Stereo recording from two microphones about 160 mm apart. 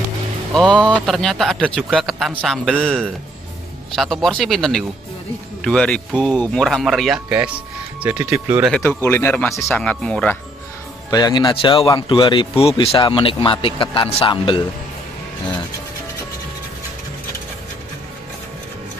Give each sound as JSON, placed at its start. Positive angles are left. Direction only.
{"t": 0.9, "sound": "speech", "side_deg": 0}
{"t": 8.7, "sound": "speech", "side_deg": 10}
{"t": 11.1, "sound": "speech", "side_deg": 25}